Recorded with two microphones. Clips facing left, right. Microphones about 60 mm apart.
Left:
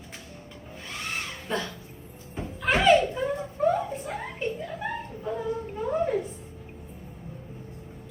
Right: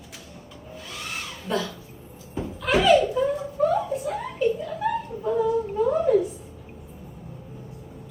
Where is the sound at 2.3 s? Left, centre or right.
Left.